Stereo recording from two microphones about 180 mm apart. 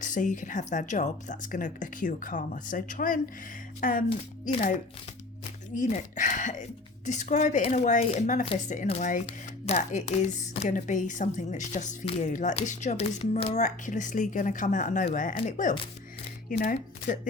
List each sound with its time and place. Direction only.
0.0 s speech: 45° left (ahead or behind)
5.7 s speech: 45° left (ahead or behind)